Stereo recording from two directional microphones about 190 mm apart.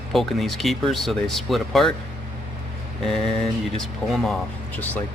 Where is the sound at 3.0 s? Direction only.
Centre (ahead or behind).